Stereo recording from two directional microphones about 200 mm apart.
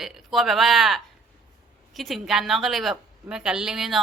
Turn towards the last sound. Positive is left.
turn(degrees=0)  # may be behind; listen again after turning